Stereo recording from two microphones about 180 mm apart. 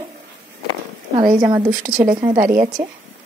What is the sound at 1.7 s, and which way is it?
Speech, 50° right (ahead or behind).